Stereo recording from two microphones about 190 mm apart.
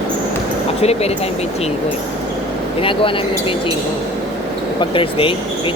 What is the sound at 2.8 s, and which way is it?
Speech, 30° left (ahead or behind).